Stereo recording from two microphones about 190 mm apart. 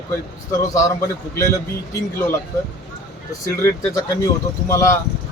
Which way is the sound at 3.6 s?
15° left (ahead or behind).